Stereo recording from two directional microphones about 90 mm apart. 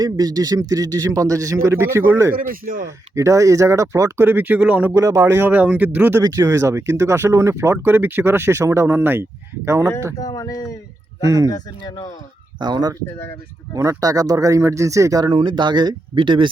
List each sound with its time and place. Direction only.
0.0 s speech: 45° right (ahead or behind)
4.3 s speech: 20° right (ahead or behind)
4.9 s speech: 30° right (ahead or behind)
6.2 s speech: 35° right (ahead or behind)
10.2 s speech: 45° left (ahead or behind)
12.5 s speech: 55° right (ahead or behind)
13.7 s speech: 40° right (ahead or behind); by 16.5 s 65° right (ahead or behind)